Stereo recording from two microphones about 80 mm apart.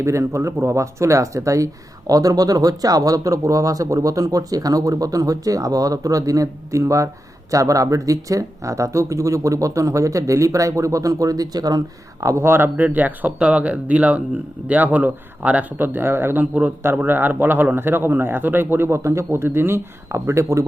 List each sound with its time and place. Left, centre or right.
0.0 s speech: right
12.2 s a man's voice: right